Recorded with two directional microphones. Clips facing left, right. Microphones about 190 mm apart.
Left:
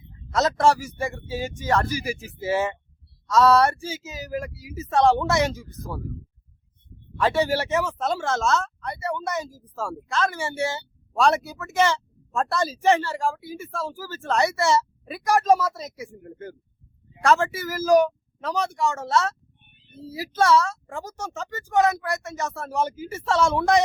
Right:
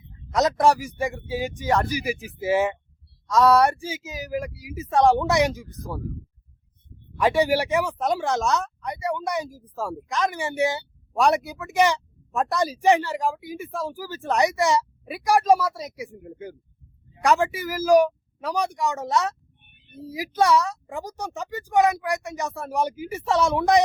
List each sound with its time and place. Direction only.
0.3 s speech: 15° right (ahead or behind)
7.2 s speech: 15° right (ahead or behind)